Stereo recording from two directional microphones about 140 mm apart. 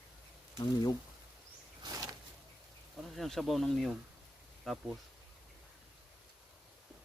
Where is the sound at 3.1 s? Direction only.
Centre (ahead or behind).